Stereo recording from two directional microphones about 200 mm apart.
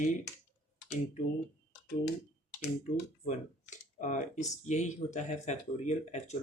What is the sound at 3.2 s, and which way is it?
Speech, 40° left (ahead or behind).